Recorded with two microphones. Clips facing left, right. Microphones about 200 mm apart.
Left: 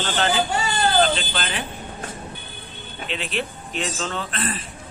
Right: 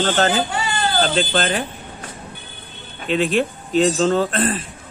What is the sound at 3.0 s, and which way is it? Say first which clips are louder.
Speech: right 10 dB; 45° right (ahead or behind).